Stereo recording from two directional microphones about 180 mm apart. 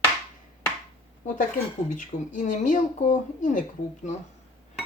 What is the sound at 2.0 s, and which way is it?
Speech, 45° left (ahead or behind).